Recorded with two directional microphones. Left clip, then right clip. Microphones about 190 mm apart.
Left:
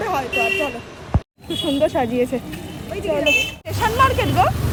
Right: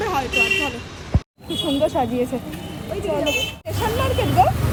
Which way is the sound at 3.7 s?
Centre (ahead or behind).